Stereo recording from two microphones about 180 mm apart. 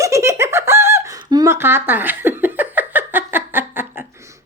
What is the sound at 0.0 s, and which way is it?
Giggle, 15° right (ahead or behind).